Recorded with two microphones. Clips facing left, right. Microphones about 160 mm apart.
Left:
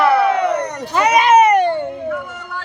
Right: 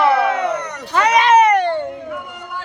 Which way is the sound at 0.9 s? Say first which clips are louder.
Left 1 dB; 10° left (ahead or behind).